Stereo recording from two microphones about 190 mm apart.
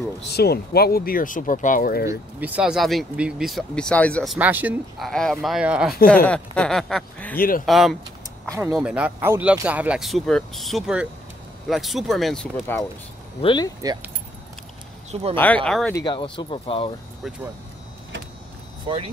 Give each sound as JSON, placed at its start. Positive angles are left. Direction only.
{"t": 0.3, "sound": "speech", "side_deg": 55}
{"t": 2.0, "sound": "speech", "side_deg": -10}
{"t": 6.2, "sound": "speech", "side_deg": 5}
{"t": 7.3, "sound": "speech", "side_deg": 50}
{"t": 7.6, "sound": "speech", "side_deg": 0}
{"t": 13.4, "sound": "speech", "side_deg": 25}
{"t": 15.3, "sound": "speech", "side_deg": 10}
{"t": 15.9, "sound": "speech", "side_deg": 25}
{"t": 18.9, "sound": "speech", "side_deg": -25}